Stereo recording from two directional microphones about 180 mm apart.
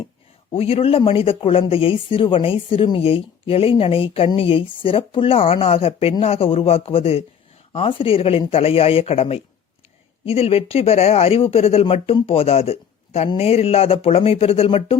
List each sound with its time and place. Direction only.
0.5 s speech: 30° left (ahead or behind)